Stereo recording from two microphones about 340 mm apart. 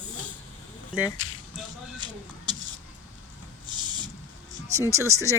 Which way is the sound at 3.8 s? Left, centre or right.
Centre.